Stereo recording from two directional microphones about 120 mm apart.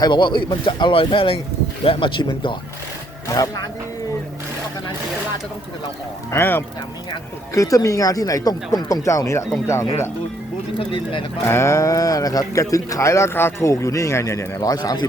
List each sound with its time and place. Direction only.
0.0 s speech: 40° left (ahead or behind)
3.3 s speech: 30° left (ahead or behind)
6.3 s speech: 20° left (ahead or behind)
10.8 s speech: 45° left (ahead or behind)
11.4 s speech: 25° left (ahead or behind)